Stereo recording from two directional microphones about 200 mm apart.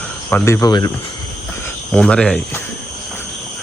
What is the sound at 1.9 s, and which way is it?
Speech, 5° left (ahead or behind).